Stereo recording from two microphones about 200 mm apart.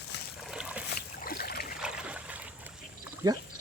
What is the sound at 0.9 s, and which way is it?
Boat, 50° left (ahead or behind).